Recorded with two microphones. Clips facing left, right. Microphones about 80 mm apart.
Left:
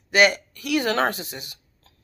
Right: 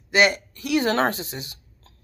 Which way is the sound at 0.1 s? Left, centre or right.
Right.